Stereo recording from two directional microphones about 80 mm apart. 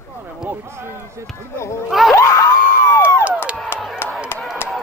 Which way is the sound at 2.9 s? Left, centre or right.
Left.